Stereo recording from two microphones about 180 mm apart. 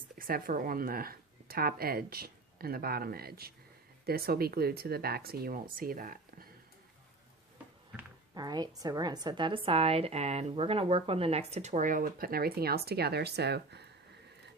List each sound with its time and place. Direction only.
0.2 s speech: 55° right (ahead or behind)
8.4 s a woman's voice: 25° right (ahead or behind); by 13.8 s 65° right (ahead or behind)